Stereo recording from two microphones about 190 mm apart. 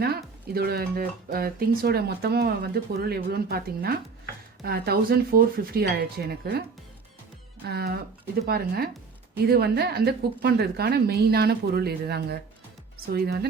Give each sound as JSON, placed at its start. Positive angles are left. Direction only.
{"t": 0.5, "sound": "speech", "side_deg": -55}
{"t": 7.7, "sound": "speech", "side_deg": -55}